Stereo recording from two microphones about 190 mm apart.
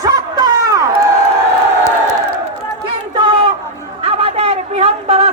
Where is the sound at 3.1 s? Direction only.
25° right (ahead or behind).